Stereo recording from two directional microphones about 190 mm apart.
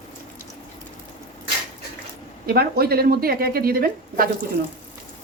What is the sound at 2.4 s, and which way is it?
A woman's voice, 55° right (ahead or behind).